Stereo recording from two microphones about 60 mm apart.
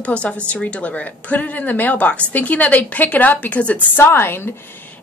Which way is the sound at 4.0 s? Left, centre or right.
Left.